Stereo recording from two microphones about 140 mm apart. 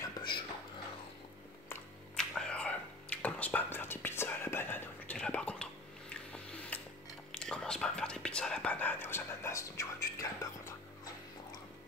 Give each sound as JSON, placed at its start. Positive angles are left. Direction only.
{"t": 0.0, "sound": "a sound", "side_deg": 35}
{"t": 2.1, "sound": "whispering", "side_deg": 5}
{"t": 7.3, "sound": "whispering", "side_deg": 5}